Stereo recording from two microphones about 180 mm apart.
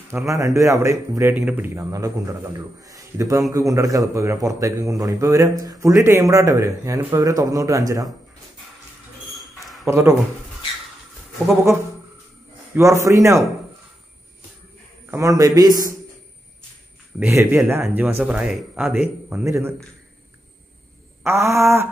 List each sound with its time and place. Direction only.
0.1 s speech: 15° right (ahead or behind)
9.6 s a sound: centre (ahead or behind)
9.8 s speech: 15° right (ahead or behind)
12.7 s speech: 15° right (ahead or behind)
15.0 s speech: 15° right (ahead or behind)
17.2 s speech: 15° right (ahead or behind)
21.2 s speech: 15° right (ahead or behind)